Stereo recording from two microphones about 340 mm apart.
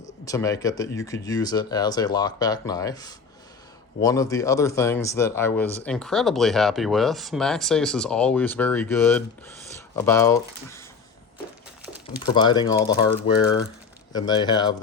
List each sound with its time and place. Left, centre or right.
0.3 s speech: centre
12.3 s speech: centre
14.1 s speech: centre